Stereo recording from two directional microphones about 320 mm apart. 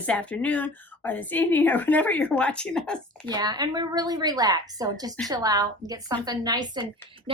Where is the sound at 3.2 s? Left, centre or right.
Centre.